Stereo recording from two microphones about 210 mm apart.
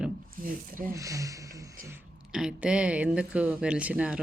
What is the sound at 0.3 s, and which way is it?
Speech, 40° right (ahead or behind).